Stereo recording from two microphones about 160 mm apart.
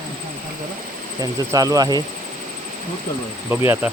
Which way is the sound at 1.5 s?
20° right (ahead or behind).